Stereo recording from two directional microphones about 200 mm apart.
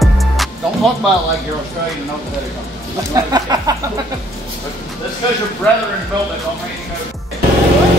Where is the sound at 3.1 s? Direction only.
20° right (ahead or behind).